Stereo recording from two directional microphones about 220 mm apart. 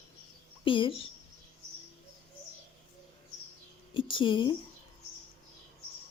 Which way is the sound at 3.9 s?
20° left (ahead or behind).